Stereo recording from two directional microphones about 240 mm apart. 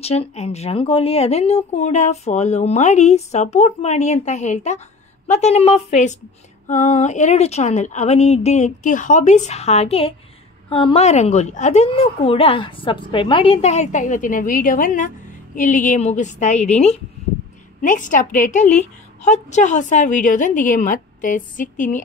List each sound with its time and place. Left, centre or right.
0.0 s a woman's voice: left